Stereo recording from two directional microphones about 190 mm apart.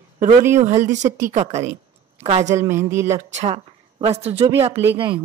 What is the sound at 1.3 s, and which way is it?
A woman's voice, 35° right (ahead or behind).